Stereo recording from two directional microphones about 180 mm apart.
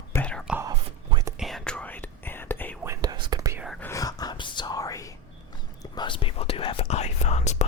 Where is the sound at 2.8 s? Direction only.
20° right (ahead or behind).